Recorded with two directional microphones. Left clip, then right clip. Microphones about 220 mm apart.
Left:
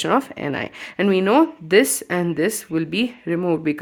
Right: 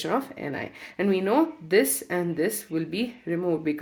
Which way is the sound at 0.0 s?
35° left (ahead or behind).